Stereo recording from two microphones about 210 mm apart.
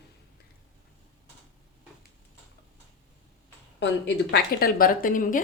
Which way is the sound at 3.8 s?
50° left (ahead or behind).